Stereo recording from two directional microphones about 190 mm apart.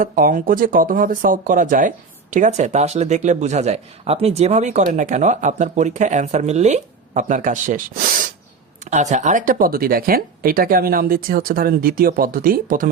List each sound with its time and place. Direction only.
0.0 s speech: 45° right (ahead or behind)